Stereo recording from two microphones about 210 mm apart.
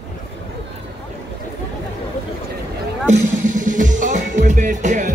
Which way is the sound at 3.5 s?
40° right (ahead or behind).